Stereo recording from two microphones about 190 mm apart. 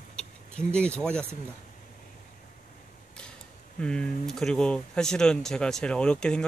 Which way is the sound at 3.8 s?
5° left (ahead or behind).